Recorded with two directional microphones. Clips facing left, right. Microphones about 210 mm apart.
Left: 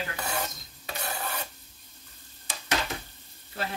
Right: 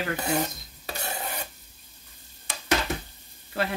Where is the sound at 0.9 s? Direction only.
20° right (ahead or behind).